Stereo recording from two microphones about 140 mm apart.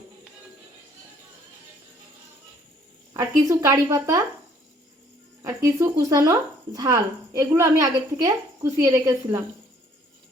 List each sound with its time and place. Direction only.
3.1 s a woman's voice: 20° right (ahead or behind)
5.4 s a woman's voice: 20° right (ahead or behind)